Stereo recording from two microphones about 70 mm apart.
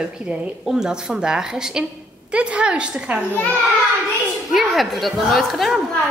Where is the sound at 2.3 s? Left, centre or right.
Centre.